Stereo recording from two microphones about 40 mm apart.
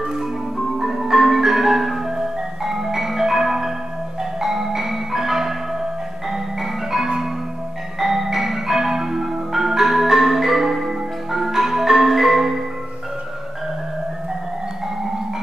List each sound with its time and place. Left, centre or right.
0.7 s marimba: centre